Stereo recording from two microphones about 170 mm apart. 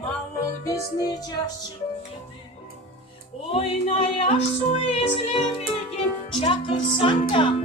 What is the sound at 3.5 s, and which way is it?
Speech, 35° left (ahead or behind).